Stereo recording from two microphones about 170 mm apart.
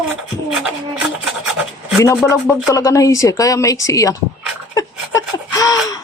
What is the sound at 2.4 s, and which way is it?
Speech, 15° left (ahead or behind).